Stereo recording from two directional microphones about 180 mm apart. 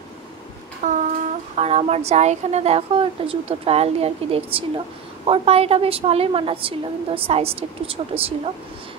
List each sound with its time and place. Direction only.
0.8 s a woman's voice: 45° right (ahead or behind)